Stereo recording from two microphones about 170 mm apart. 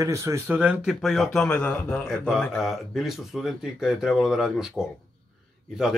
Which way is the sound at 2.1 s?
5° right (ahead or behind).